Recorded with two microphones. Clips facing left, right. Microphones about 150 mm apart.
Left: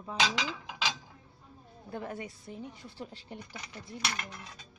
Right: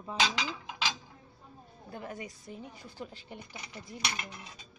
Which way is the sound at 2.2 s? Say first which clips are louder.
Left 2 dB; 30° left (ahead or behind).